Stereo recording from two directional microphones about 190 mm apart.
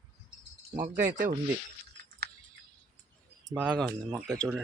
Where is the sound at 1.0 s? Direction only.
45° right (ahead or behind).